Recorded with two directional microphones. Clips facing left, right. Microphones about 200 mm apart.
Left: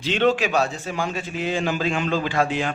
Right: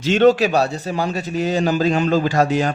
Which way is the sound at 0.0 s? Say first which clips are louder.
Right 6 dB; 45° right (ahead or behind).